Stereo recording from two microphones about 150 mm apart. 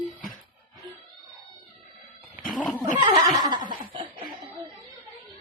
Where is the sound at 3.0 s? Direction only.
25° right (ahead or behind).